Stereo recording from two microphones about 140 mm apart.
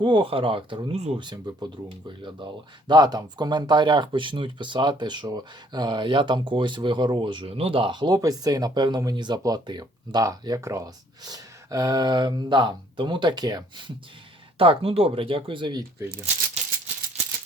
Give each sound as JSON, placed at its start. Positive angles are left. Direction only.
{"t": 0.0, "sound": "speech", "side_deg": -35}
{"t": 1.2, "sound": "speech", "side_deg": -30}